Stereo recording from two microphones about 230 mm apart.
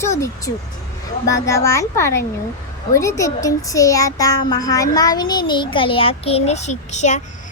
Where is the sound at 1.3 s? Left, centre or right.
Centre.